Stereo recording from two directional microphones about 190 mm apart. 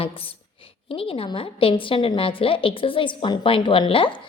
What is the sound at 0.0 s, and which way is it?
A woman's voice, 30° left (ahead or behind).